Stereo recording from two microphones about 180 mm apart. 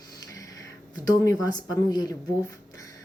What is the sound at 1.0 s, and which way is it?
Speech, 20° left (ahead or behind).